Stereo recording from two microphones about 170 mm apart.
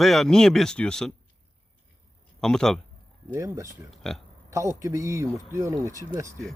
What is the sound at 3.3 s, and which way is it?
Speech, 15° right (ahead or behind).